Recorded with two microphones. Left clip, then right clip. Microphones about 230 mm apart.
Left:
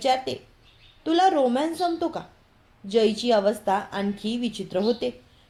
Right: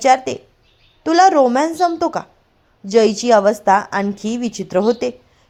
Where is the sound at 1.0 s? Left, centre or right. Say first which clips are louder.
Right 9 dB; right.